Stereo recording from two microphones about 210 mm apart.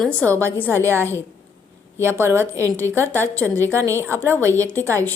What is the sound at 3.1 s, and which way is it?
Speech, 10° left (ahead or behind).